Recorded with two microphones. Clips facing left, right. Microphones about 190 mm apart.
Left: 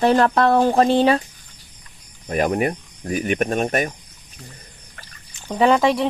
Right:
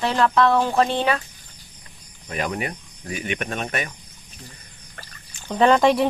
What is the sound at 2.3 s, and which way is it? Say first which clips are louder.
Speech: left 7 dB; 45° left (ahead or behind).